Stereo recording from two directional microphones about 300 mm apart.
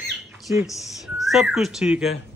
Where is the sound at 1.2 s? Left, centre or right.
Centre.